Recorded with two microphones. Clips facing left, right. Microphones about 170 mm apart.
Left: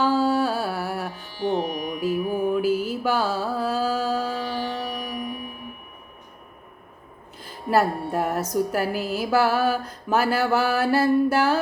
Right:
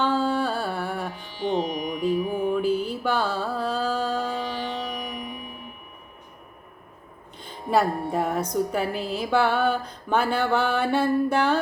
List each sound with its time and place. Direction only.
0.0 s music: 5° left (ahead or behind)
1.1 s music: 15° right (ahead or behind)
2.4 s mantra: 10° left (ahead or behind)
4.4 s music: 20° right (ahead or behind)
7.3 s music: 5° left (ahead or behind)